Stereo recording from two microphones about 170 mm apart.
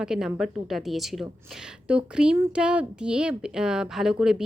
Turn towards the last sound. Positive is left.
turn(degrees=-5)  # may be behind; listen again after turning